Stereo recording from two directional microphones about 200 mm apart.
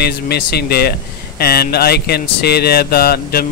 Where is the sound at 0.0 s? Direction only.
55° left (ahead or behind).